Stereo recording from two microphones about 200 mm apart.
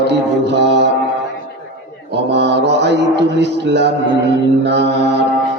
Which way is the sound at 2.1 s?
60° right (ahead or behind).